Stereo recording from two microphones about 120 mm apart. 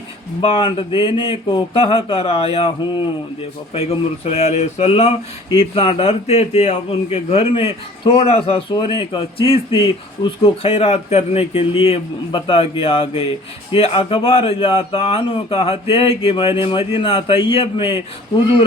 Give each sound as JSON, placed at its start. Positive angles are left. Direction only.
{"t": 0.4, "sound": "a man's voice", "side_deg": 45}
{"t": 3.8, "sound": "a man's voice", "side_deg": 60}
{"t": 5.7, "sound": "a man's voice", "side_deg": 45}
{"t": 8.7, "sound": "a man's voice", "side_deg": 45}